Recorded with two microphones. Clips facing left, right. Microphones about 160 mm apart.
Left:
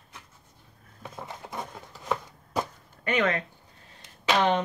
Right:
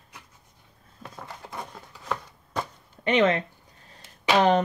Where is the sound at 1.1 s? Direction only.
20° left (ahead or behind).